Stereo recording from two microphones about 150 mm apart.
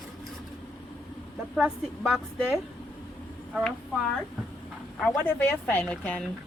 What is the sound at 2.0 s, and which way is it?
Speech, 5° left (ahead or behind).